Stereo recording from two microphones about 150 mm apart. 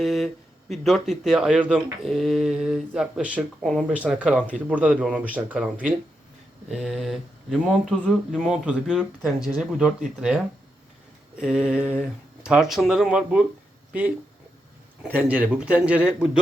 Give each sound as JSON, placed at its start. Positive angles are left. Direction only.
{"t": 0.0, "sound": "a sound", "side_deg": 0}
{"t": 0.7, "sound": "a man's voice", "side_deg": 0}
{"t": 15.0, "sound": "a man's voice", "side_deg": -10}